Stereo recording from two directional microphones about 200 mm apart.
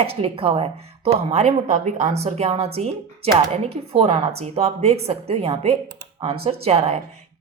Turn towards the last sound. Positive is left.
turn(degrees=-30)  # may be behind; listen again after turning